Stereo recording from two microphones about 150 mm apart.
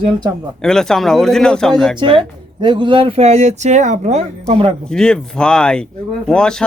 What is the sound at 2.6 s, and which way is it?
Speech, 30° right (ahead or behind).